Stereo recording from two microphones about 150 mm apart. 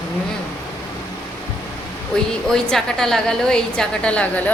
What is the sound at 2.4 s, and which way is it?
A woman's voice, 5° left (ahead or behind).